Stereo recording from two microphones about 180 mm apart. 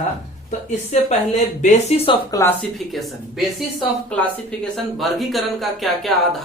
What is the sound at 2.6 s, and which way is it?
A woman's voice, centre (ahead or behind).